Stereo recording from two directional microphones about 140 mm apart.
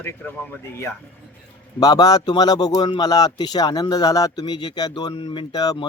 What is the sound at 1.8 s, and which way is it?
Speech, 25° left (ahead or behind).